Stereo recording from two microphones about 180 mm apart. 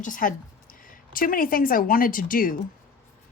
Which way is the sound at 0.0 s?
50° left (ahead or behind).